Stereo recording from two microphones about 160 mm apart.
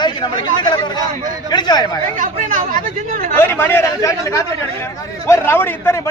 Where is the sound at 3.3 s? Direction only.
15° left (ahead or behind).